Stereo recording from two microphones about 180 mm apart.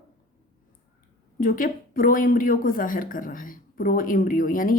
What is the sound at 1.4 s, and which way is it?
A woman's voice, 50° left (ahead or behind).